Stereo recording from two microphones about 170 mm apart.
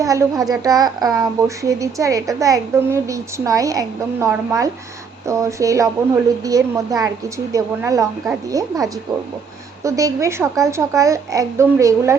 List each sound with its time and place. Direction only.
0.0 s a woman's voice: 20° right (ahead or behind)